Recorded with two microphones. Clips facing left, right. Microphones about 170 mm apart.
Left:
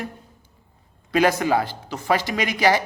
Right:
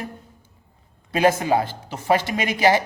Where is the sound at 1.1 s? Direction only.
25° right (ahead or behind).